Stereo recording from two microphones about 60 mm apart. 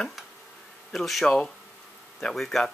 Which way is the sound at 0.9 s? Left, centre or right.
Centre.